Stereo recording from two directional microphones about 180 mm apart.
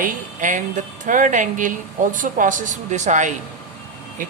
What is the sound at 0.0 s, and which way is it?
Speech, 45° right (ahead or behind).